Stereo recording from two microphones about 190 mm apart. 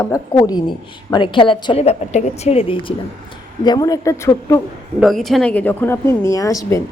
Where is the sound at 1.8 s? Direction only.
35° left (ahead or behind); by 4.6 s 15° left (ahead or behind).